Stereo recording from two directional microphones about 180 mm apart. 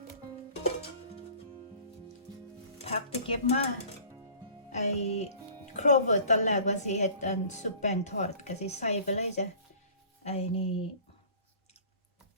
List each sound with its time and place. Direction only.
2.8 s speech: 35° left (ahead or behind)
4.7 s music: 40° left (ahead or behind)
5.7 s a woman's voice: 40° left (ahead or behind)